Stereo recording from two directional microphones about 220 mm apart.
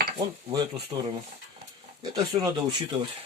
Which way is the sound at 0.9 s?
20° right (ahead or behind).